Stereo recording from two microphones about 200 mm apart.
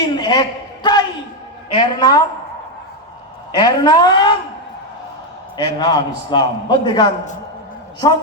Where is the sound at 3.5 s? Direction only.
20° left (ahead or behind).